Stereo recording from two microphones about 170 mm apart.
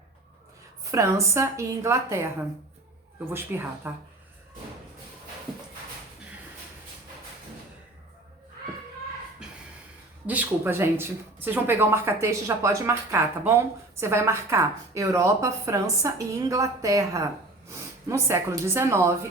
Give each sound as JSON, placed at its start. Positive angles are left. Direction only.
{"t": 0.9, "sound": "speech", "side_deg": -20}
{"t": 9.4, "sound": "a sound", "side_deg": -5}
{"t": 10.2, "sound": "speech", "side_deg": -10}